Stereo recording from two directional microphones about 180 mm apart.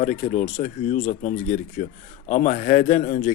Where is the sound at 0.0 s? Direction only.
45° left (ahead or behind).